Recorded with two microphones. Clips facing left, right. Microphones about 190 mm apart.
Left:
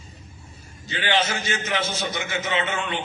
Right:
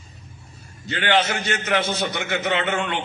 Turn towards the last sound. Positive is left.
turn(degrees=-55)  # may be behind; listen again after turning